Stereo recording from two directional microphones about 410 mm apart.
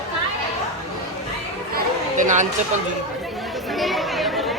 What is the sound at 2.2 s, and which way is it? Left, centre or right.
Speech, centre.